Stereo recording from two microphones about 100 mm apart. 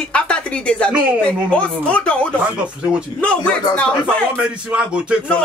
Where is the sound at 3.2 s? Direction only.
10° left (ahead or behind).